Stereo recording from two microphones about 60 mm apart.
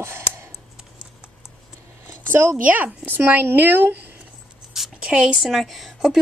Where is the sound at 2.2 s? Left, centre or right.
Right.